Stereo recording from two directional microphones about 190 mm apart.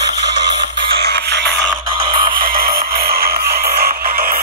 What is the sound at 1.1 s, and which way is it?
Music, 60° right (ahead or behind).